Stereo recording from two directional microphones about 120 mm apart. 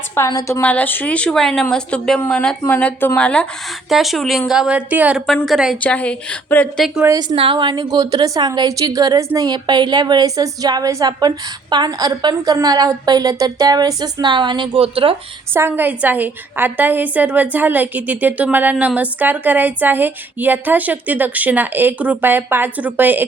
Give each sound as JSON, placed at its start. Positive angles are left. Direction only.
{"t": 0.2, "sound": "a woman's voice", "side_deg": 20}
{"t": 5.8, "sound": "speech", "side_deg": 10}
{"t": 7.1, "sound": "a woman's voice", "side_deg": -35}
{"t": 15.5, "sound": "a woman's voice", "side_deg": -20}